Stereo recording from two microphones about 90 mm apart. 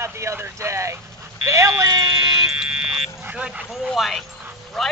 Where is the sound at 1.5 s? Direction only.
35° right (ahead or behind).